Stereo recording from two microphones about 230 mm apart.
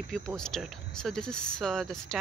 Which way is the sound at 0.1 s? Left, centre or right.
Centre.